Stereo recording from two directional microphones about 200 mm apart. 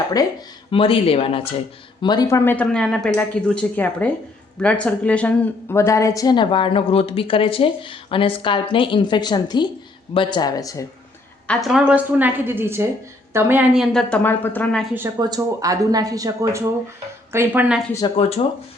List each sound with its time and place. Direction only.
0.7 s a woman's voice: 25° left (ahead or behind)
11.4 s a woman's voice: centre (ahead or behind)
14.9 s speech: 15° right (ahead or behind)
18.2 s speech: 30° left (ahead or behind)